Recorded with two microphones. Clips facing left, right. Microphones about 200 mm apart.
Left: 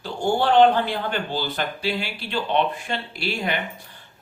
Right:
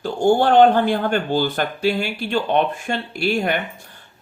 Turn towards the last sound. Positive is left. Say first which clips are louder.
# right 6 dB
turn(degrees=-50)  # may be behind; listen again after turning